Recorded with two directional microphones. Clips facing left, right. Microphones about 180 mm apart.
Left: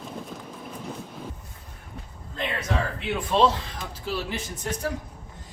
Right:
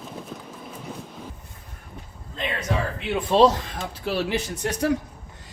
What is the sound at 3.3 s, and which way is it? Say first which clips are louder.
Speech: right 4 dB; 30° right (ahead or behind).